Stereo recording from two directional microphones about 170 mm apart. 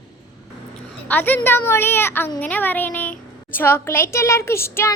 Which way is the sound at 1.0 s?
10° left (ahead or behind).